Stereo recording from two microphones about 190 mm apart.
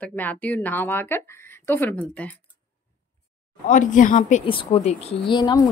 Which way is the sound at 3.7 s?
40° left (ahead or behind).